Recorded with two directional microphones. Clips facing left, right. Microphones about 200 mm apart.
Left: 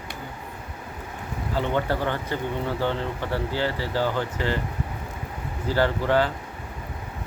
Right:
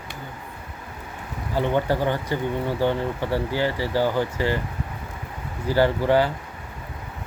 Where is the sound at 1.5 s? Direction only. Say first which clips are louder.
Right 3 dB; 15° right (ahead or behind).